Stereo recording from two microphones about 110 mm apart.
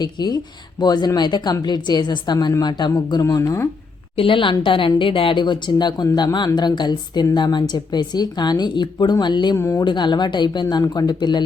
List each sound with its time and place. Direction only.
0.0 s a woman's voice: 40° left (ahead or behind)
4.2 s a woman's voice: 50° left (ahead or behind)
9.6 s speech: 25° left (ahead or behind)
9.8 s a woman's voice: 45° left (ahead or behind)